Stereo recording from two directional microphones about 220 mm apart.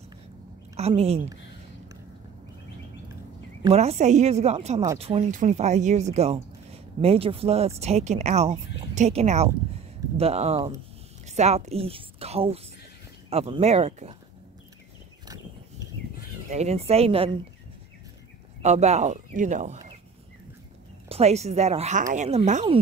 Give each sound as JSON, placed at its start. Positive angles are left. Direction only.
{"t": 0.7, "sound": "a woman's voice", "side_deg": -25}
{"t": 3.7, "sound": "speech", "side_deg": -30}
{"t": 16.4, "sound": "speech", "side_deg": -30}
{"t": 18.6, "sound": "speech", "side_deg": -30}
{"t": 21.1, "sound": "speech", "side_deg": -30}